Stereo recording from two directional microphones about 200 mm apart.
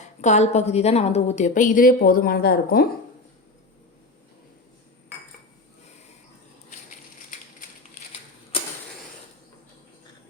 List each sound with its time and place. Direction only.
0.0 s a woman's voice: 35° left (ahead or behind)